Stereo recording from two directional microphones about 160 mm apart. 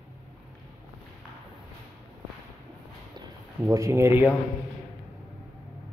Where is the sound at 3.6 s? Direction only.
20° right (ahead or behind).